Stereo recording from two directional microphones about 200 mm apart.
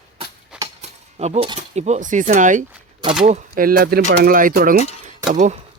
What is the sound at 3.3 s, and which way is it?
Speech, 45° right (ahead or behind).